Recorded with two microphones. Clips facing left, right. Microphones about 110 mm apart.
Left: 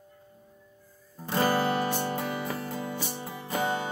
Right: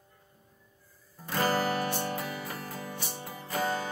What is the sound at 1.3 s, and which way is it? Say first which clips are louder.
Music: left 3 dB; 25° left (ahead or behind).